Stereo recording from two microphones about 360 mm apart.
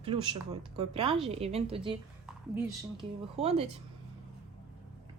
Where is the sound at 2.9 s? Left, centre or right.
Centre.